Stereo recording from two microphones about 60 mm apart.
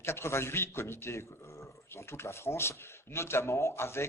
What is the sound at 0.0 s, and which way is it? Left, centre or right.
Speech, left.